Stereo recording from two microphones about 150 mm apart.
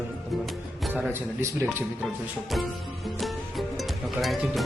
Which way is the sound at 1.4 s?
20° right (ahead or behind).